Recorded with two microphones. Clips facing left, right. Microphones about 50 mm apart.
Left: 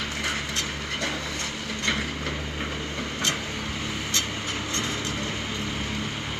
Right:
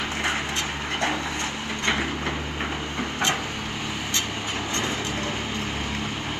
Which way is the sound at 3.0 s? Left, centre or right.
Centre.